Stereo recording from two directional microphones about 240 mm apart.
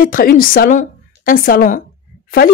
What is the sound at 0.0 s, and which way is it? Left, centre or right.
A woman's voice, left.